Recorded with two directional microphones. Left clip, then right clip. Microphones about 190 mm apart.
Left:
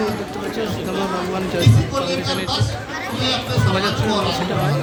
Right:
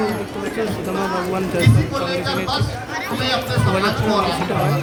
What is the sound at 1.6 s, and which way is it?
Speech, 15° left (ahead or behind).